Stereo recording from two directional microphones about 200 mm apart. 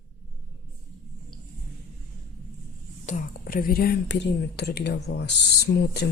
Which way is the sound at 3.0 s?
40° left (ahead or behind).